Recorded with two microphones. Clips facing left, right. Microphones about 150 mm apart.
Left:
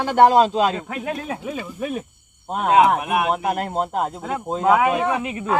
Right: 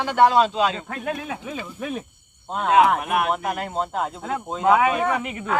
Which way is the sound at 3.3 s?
40° left (ahead or behind).